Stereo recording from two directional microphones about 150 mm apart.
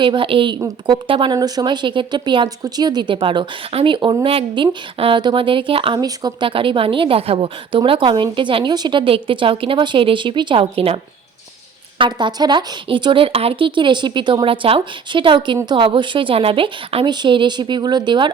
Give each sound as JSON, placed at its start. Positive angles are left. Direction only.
{"t": 0.0, "sound": "a woman's voice", "side_deg": -35}